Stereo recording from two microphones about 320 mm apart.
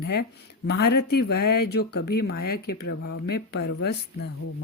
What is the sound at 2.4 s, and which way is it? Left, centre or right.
A woman's voice, left.